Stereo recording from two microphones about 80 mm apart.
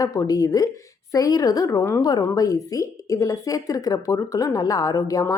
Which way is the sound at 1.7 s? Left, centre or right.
Left.